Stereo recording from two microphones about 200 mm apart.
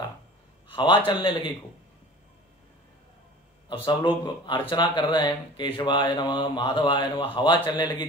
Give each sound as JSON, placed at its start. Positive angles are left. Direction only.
{"t": 0.7, "sound": "speech", "side_deg": 25}
{"t": 3.6, "sound": "speech", "side_deg": 25}